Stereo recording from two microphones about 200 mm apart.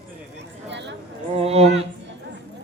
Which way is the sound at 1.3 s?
30° right (ahead or behind).